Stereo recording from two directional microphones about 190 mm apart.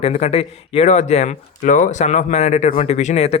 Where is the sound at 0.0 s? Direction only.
35° left (ahead or behind).